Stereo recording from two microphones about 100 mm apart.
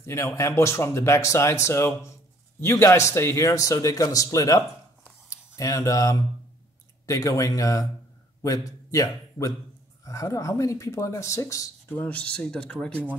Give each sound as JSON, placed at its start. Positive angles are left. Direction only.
{"t": 0.0, "sound": "a man's voice", "side_deg": 30}
{"t": 11.9, "sound": "speech", "side_deg": 15}